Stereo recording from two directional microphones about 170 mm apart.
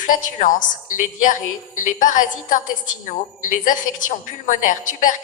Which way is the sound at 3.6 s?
50° left (ahead or behind).